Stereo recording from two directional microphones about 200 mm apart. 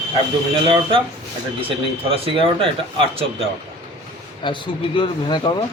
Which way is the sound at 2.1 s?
30° right (ahead or behind).